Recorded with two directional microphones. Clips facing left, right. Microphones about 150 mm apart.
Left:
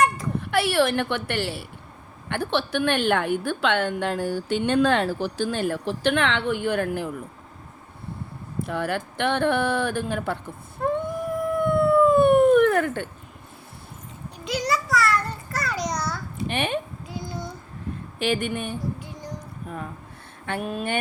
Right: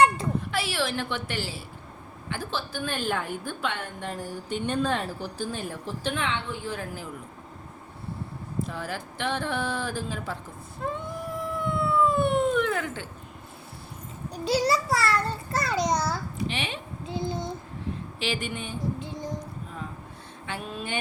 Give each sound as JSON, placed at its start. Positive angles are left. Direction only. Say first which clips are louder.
{"t": 0.5, "sound": "a woman's voice", "louder": "left 12 dB", "side_deg": 60}
{"t": 8.6, "sound": "speech", "louder": "left 7 dB", "side_deg": 65}
{"t": 10.8, "sound": "howl", "louder": "left 7 dB", "side_deg": 55}
{"t": 14.4, "sound": "a sound", "louder": "right 2 dB", "side_deg": -30}
{"t": 16.5, "sound": "a sound", "louder": "left 12 dB", "side_deg": 55}
{"t": 17.1, "sound": "child singing", "louder": "right 7 dB", "side_deg": -25}
{"t": 18.2, "sound": "speech", "louder": "left 7 dB", "side_deg": 55}
{"t": 18.9, "sound": "child singing", "louder": "right 3 dB", "side_deg": -25}
{"t": 19.6, "sound": "music", "louder": "left 4 dB", "side_deg": 55}
{"t": 20.5, "sound": "a sound", "louder": "left 6 dB", "side_deg": 55}